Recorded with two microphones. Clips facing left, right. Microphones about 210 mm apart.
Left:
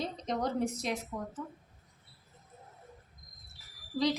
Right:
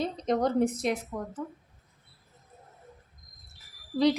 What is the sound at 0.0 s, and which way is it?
Speech, 55° right (ahead or behind).